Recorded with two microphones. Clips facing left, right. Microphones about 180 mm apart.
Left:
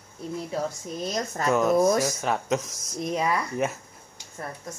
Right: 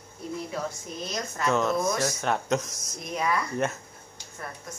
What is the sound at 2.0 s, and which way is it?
Speech, centre (ahead or behind).